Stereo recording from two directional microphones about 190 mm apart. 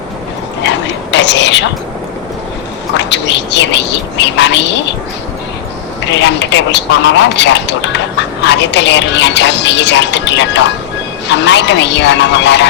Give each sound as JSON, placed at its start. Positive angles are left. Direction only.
{"t": 0.6, "sound": "a sound", "side_deg": 65}
{"t": 3.0, "sound": "speech", "side_deg": 65}
{"t": 6.1, "sound": "speech", "side_deg": 70}